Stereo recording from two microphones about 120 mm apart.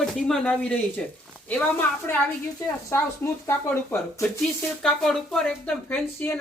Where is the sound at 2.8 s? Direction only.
20° left (ahead or behind).